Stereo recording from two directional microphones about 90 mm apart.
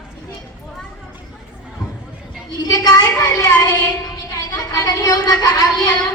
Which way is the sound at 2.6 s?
50° left (ahead or behind).